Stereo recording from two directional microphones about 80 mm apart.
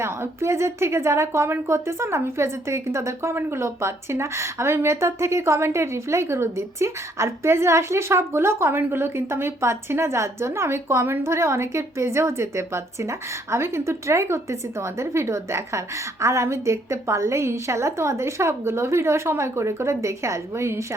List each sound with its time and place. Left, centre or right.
0.0 s a woman's voice: right